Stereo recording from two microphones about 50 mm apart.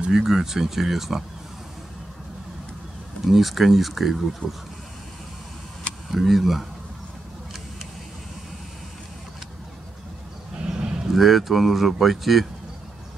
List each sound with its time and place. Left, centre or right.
0.1 s speech: centre
3.3 s speech: centre
6.1 s speech: centre
10.6 s livestock: centre
11.1 s speech: centre